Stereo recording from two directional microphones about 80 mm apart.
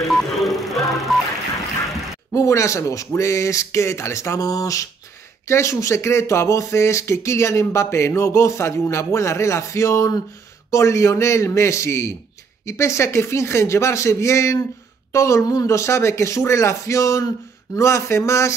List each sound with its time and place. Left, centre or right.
0.1 s music: centre
2.3 s speech: left